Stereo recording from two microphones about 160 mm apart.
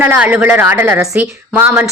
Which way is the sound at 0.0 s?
10° right (ahead or behind).